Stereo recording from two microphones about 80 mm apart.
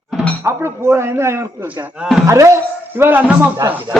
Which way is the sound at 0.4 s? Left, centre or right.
Right.